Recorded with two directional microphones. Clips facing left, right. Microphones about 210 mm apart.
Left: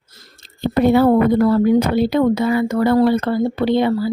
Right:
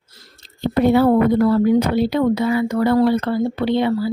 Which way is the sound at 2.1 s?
50° left (ahead or behind).